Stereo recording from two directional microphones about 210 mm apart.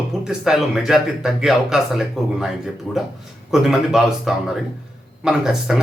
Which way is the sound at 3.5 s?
Centre (ahead or behind).